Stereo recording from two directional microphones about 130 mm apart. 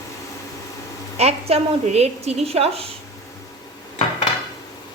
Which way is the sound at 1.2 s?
50° right (ahead or behind).